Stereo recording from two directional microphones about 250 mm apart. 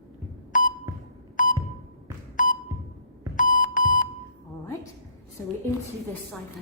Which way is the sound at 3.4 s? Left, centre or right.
Left.